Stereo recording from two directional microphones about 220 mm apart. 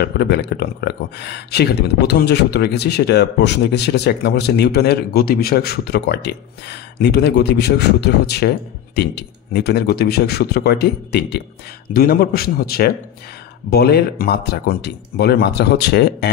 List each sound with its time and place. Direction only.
0.0 s speech: 50° left (ahead or behind)